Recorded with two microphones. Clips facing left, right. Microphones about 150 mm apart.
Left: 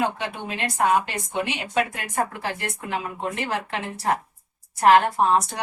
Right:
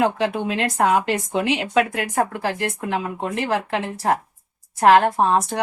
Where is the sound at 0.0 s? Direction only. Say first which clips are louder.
Right 6 dB; 90° right.